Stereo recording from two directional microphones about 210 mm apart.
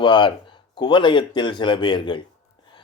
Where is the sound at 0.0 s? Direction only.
20° left (ahead or behind).